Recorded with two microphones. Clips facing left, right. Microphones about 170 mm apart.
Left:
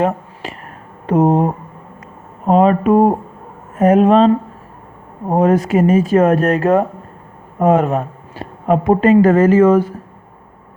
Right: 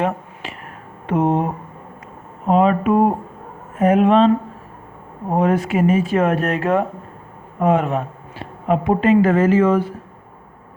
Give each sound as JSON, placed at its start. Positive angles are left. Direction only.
{"t": 0.4, "sound": "a sound", "side_deg": 40}
{"t": 1.0, "sound": "speech", "side_deg": 40}
{"t": 2.5, "sound": "speech", "side_deg": 40}
{"t": 5.3, "sound": "speech", "side_deg": 40}